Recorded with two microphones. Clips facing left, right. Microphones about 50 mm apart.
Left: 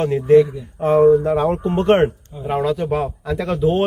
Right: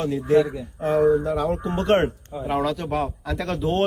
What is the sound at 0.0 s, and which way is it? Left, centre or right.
Speech, left.